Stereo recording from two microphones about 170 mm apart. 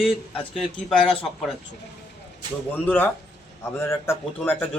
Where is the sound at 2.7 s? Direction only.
10° left (ahead or behind).